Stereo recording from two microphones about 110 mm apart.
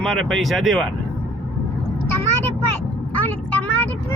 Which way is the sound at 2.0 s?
20° left (ahead or behind).